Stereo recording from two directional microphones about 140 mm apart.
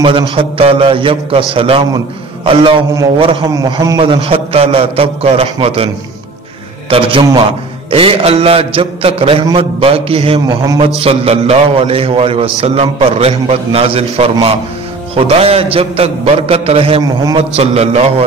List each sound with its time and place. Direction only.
0.0 s a man's voice: 40° right (ahead or behind)
3.4 s a man's voice: 25° right (ahead or behind)
4.0 s a man's voice: 40° right (ahead or behind)
6.9 s a man's voice: 40° right (ahead or behind)
10.4 s a man's voice: 25° right (ahead or behind)
11.0 s a man's voice: 45° right (ahead or behind)
17.0 s a man's voice: 25° right (ahead or behind)
17.4 s a man's voice: 45° right (ahead or behind)